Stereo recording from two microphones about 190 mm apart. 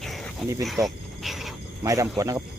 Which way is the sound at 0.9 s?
Centre (ahead or behind).